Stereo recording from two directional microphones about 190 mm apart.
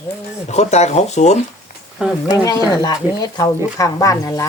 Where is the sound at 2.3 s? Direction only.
20° left (ahead or behind).